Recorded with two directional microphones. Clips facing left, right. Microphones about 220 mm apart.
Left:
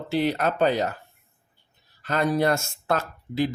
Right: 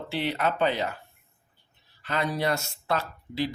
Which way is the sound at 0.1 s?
40° left (ahead or behind).